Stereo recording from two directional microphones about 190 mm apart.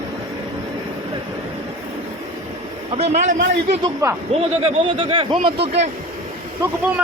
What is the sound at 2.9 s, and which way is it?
A man's voice, 35° right (ahead or behind).